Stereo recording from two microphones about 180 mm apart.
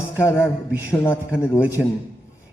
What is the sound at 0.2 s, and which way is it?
A man's voice, 15° left (ahead or behind).